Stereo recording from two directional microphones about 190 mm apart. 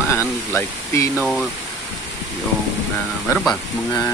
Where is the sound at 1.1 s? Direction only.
Centre (ahead or behind).